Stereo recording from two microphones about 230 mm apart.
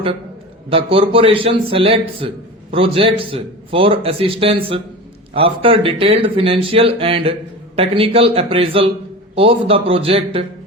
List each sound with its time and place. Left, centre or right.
0.7 s speech: right